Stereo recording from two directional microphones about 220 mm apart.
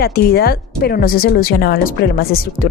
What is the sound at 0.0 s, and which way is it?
Speech, 45° left (ahead or behind).